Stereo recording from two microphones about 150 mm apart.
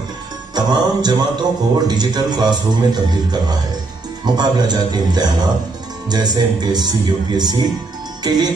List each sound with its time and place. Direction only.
0.6 s a man's voice: 25° right (ahead or behind)
8.2 s music: 25° right (ahead or behind)